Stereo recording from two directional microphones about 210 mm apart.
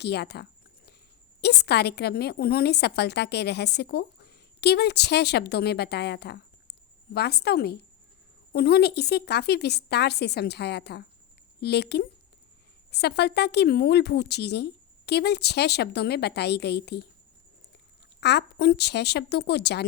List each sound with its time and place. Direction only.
0.0 s a woman's voice: 50° left (ahead or behind)
18.2 s a woman's voice: 50° left (ahead or behind)